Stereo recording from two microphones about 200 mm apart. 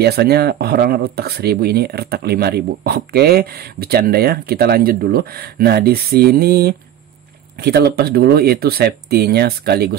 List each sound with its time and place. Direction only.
0.0 s speech: 50° right (ahead or behind)